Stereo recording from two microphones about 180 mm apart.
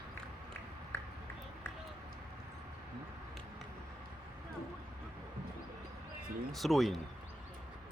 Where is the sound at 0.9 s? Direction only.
15° left (ahead or behind).